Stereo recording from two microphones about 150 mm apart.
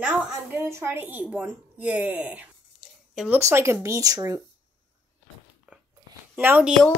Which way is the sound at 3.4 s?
20° right (ahead or behind).